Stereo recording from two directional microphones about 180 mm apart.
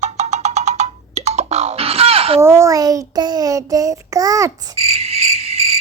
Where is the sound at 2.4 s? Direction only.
15° right (ahead or behind).